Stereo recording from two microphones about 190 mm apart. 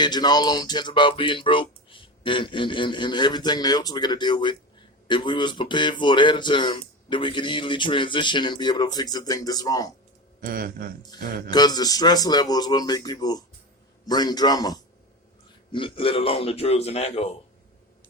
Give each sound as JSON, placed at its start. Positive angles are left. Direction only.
{"t": 0.0, "sound": "speech", "side_deg": 20}
{"t": 10.4, "sound": "a man's voice", "side_deg": -50}
{"t": 11.5, "sound": "a man's voice", "side_deg": 20}